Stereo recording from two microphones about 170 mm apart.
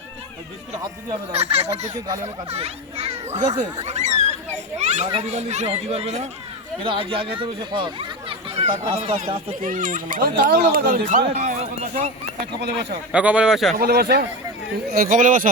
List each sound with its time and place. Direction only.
1.3 s a child's voice: 35° right (ahead or behind)
3.8 s a sound: 40° right (ahead or behind)
4.8 s a child's voice: 40° right (ahead or behind)
9.6 s speech: 50° right (ahead or behind)
12.6 s speech: 75° right (ahead or behind)
13.1 s speech: 5° right (ahead or behind)
13.7 s speech: 65° right (ahead or behind)
14.9 s speech: 50° right (ahead or behind)